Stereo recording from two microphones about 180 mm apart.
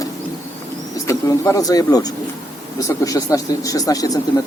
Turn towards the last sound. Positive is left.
turn(degrees=20)  # may be behind; listen again after turning